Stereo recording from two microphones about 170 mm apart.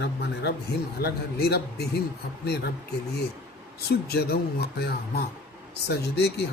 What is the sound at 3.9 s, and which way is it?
Speech, 65° left (ahead or behind).